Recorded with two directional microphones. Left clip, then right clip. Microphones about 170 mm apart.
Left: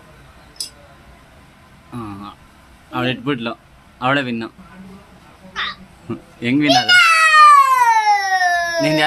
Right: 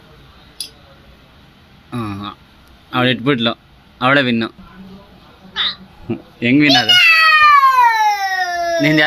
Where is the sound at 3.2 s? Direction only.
25° right (ahead or behind).